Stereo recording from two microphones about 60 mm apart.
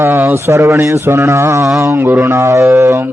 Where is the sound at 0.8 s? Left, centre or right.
Right.